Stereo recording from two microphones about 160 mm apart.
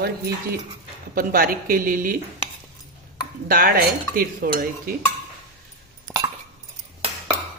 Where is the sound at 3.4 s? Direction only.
65° right (ahead or behind).